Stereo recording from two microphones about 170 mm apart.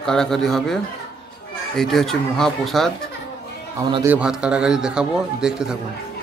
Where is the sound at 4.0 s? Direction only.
10° right (ahead or behind).